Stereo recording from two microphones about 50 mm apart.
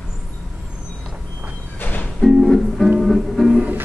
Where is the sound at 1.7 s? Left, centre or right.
Left.